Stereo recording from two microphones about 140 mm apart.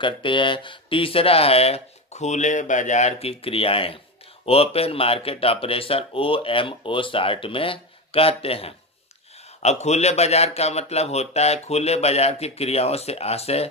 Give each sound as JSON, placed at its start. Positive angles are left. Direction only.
{"t": 0.0, "sound": "a man's voice", "side_deg": 35}